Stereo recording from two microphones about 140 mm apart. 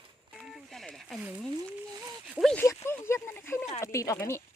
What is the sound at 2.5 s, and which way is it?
Speech, 20° left (ahead or behind).